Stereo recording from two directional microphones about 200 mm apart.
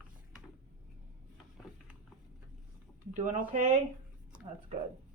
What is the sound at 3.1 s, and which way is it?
Speech, 40° right (ahead or behind).